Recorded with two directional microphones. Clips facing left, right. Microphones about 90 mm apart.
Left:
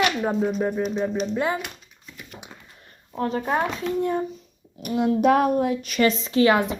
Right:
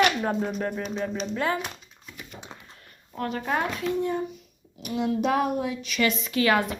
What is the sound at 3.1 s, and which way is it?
Speech, 25° left (ahead or behind).